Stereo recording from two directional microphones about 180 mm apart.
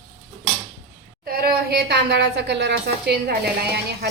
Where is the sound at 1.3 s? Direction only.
65° right (ahead or behind).